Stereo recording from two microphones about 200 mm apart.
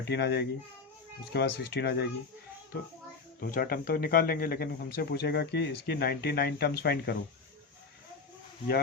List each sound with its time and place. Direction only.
0.0 s speech: 55° left (ahead or behind)
3.4 s speech: 45° left (ahead or behind)